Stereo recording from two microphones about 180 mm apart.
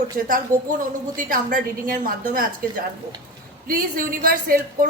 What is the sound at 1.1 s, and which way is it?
A woman's voice, 50° right (ahead or behind).